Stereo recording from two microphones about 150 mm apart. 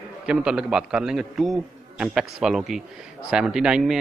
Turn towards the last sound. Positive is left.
turn(degrees=-5)  # may be behind; listen again after turning